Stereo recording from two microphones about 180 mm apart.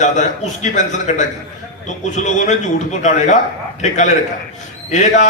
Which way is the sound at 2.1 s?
40° left (ahead or behind).